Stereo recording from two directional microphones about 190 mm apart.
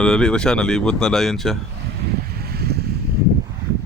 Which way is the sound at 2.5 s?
55° right (ahead or behind).